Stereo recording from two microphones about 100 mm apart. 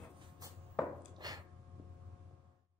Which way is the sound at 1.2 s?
40° right (ahead or behind).